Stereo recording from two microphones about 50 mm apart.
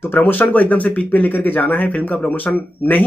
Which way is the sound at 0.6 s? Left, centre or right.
Left.